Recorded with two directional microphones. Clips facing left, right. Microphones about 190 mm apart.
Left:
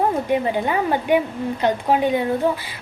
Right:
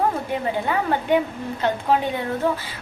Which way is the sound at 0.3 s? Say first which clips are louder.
Left 4 dB; 15° left (ahead or behind).